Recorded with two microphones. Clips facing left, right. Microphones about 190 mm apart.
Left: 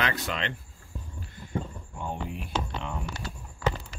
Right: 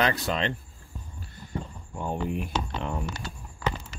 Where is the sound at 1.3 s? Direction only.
35° right (ahead or behind).